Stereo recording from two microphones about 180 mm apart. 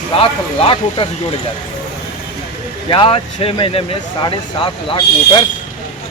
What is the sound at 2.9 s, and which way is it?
Speech, 30° left (ahead or behind).